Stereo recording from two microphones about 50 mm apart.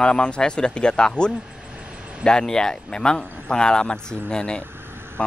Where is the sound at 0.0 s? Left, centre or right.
Centre.